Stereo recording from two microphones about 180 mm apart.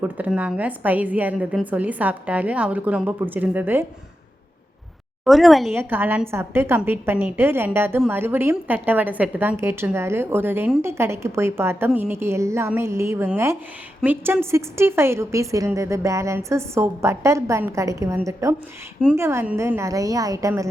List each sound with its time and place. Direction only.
0.0 s a woman's voice: 10° right (ahead or behind)
5.2 s a woman's voice: centre (ahead or behind)
5.7 s a woman's voice: 10° right (ahead or behind)